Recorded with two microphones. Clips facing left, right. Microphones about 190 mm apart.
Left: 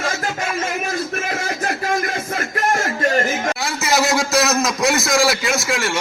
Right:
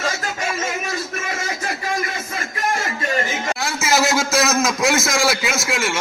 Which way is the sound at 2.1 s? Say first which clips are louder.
Left 5 dB; 55° left (ahead or behind).